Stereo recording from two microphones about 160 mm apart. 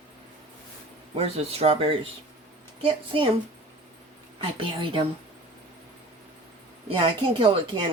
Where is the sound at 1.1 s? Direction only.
40° right (ahead or behind).